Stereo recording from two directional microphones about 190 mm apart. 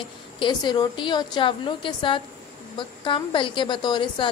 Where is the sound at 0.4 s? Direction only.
25° left (ahead or behind).